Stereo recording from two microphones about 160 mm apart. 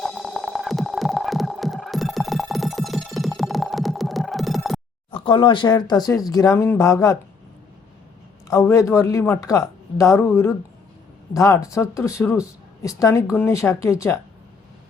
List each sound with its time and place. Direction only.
0.0 s music: centre (ahead or behind)
5.1 s speech: 30° left (ahead or behind)
8.4 s speech: 20° left (ahead or behind)